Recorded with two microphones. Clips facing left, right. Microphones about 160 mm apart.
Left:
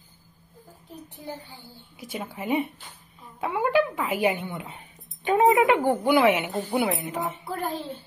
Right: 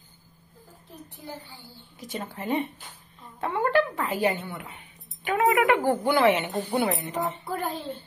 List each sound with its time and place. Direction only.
1.2 s a woman's voice: 15° left (ahead or behind)
4.7 s music: 30° left (ahead or behind)
5.6 s a woman's voice: 20° left (ahead or behind)
7.4 s a woman's voice: centre (ahead or behind)